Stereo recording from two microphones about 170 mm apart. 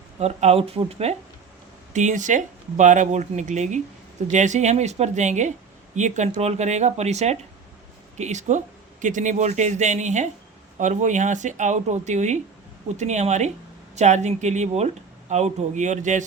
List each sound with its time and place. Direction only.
0.2 s speech: 40° right (ahead or behind)